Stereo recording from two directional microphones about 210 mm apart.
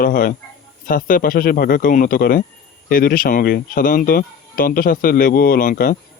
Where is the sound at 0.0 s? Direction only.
40° left (ahead or behind).